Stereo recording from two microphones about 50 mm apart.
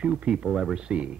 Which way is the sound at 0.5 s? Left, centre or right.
Centre.